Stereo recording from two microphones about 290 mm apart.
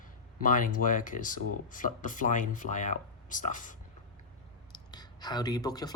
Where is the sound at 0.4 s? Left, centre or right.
Left.